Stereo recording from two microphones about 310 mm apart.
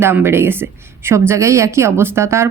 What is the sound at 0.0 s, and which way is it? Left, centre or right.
A woman's voice, centre.